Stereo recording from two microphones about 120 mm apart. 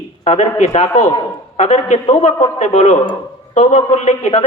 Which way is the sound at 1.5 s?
80° left.